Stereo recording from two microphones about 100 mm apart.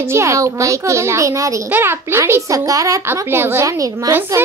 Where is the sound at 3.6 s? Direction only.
35° right (ahead or behind).